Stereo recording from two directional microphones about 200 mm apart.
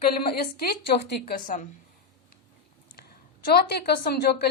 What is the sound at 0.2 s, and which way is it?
Speech, 50° left (ahead or behind).